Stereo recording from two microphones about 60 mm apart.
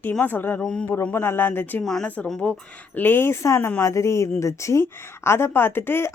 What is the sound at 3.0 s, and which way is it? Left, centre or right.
Speech, left.